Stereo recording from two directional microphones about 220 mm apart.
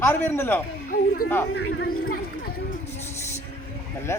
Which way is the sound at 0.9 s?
40° left (ahead or behind).